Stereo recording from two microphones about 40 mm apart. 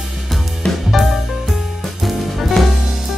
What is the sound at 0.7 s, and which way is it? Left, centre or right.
Music, centre.